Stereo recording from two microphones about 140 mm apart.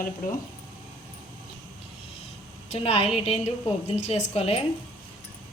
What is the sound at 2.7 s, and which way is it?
A woman's voice, 45° left (ahead or behind).